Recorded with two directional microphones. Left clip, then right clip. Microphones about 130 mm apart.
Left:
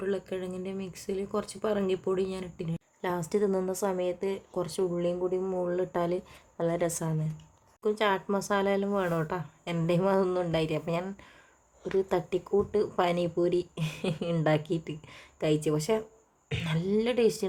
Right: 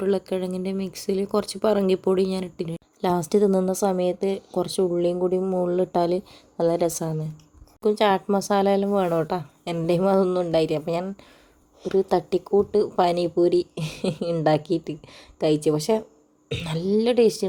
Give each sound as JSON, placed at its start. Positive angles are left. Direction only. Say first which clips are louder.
{"t": 0.0, "sound": "speech", "louder": "right 8 dB", "side_deg": -40}
{"t": 5.2, "sound": "speech", "louder": "right 7 dB", "side_deg": -20}
{"t": 5.6, "sound": "speech", "louder": "right 7 dB", "side_deg": -30}